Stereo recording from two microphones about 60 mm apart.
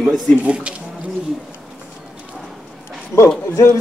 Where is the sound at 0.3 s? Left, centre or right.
Left.